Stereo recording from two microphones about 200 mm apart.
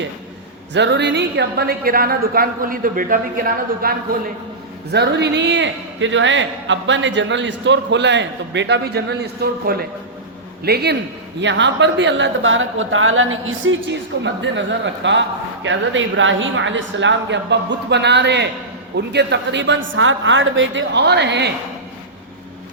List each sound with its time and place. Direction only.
0.7 s a woman's voice: 60° right (ahead or behind)
4.9 s a man's voice: 55° right (ahead or behind)
11.3 s a woman's voice: 65° right (ahead or behind)
14.4 s a man's voice: 65° right (ahead or behind)